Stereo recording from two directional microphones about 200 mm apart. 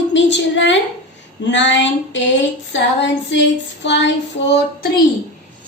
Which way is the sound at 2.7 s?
65° left (ahead or behind).